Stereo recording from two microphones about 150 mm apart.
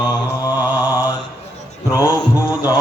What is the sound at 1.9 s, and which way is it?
Mantra, 15° left (ahead or behind).